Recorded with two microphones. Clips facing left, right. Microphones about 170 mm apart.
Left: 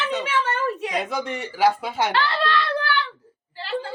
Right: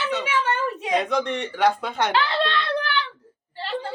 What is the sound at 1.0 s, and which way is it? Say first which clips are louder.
Speech: right 3 dB; 5° left (ahead or behind).